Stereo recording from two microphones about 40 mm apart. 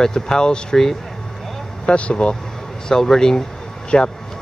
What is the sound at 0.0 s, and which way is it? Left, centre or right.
Speech, centre.